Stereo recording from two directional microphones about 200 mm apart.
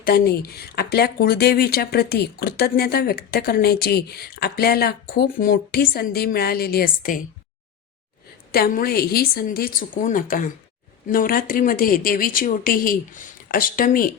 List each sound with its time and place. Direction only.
0.0 s speech: 50° left (ahead or behind)
8.5 s speech: 50° left (ahead or behind)